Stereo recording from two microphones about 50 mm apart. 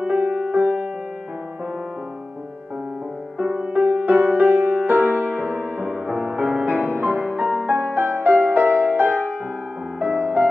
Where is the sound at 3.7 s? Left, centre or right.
Right.